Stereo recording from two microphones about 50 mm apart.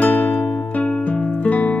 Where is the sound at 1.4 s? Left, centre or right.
Left.